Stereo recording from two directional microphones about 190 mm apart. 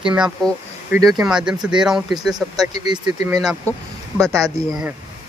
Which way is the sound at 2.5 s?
20° right (ahead or behind).